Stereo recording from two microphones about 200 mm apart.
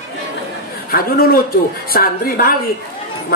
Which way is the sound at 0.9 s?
50° left (ahead or behind).